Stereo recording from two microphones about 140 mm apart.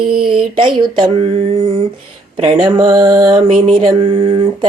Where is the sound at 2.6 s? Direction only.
30° right (ahead or behind).